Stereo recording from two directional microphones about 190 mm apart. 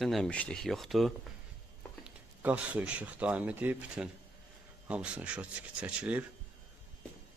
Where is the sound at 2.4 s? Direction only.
10° right (ahead or behind).